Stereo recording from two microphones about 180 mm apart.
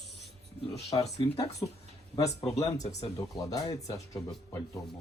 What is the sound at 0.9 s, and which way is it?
Speech, 20° left (ahead or behind).